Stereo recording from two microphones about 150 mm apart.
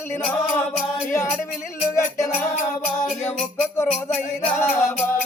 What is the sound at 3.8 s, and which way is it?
Music, 10° left (ahead or behind).